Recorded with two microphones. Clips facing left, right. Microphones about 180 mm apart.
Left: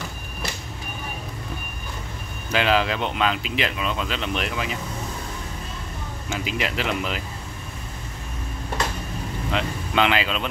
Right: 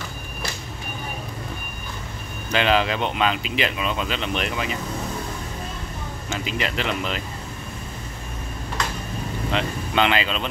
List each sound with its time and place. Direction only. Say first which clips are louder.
2.5 s speech: right 1 dB; 5° left (ahead or behind)
6.3 s speech: even; 5° left (ahead or behind)
9.5 s speech: right 1 dB; centre (ahead or behind)